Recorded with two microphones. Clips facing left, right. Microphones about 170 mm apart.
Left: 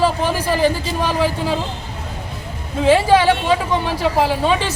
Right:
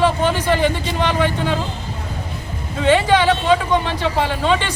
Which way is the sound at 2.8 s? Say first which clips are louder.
Left 2 dB; 5° left (ahead or behind).